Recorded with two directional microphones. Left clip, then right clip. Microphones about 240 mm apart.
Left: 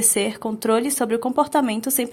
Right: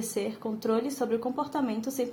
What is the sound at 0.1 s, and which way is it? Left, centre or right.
A woman's voice, left.